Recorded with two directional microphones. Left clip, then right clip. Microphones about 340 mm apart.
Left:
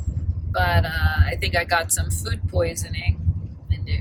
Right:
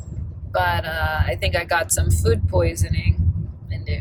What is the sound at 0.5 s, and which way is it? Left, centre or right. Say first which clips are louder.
Speech: right 2 dB; centre.